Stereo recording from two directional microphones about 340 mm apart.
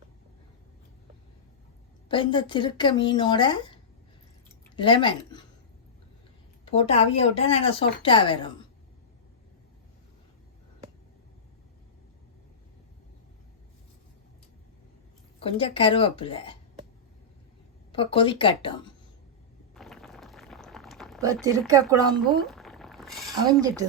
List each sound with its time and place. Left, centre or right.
2.0 s speech: centre
6.7 s speech: centre
15.4 s speech: centre
17.9 s speech: centre
19.7 s boiling: centre
21.7 s speech: centre
22.4 s a sound: centre
23.5 s speech: centre